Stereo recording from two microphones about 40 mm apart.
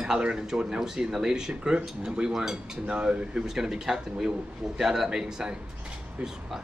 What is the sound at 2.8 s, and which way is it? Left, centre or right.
Speech, right.